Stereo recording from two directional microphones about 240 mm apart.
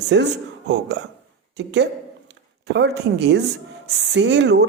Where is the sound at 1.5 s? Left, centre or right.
Right.